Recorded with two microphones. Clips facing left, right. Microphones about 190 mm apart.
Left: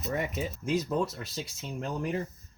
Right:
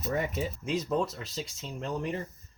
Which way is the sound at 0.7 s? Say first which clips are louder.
Left 1 dB; 5° left (ahead or behind).